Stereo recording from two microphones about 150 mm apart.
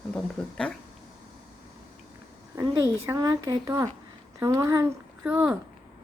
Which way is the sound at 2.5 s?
20° right (ahead or behind).